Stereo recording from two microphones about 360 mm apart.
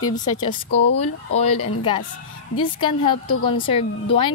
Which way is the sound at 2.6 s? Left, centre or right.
Centre.